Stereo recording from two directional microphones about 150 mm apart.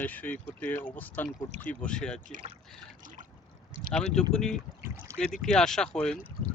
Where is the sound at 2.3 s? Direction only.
55° right (ahead or behind).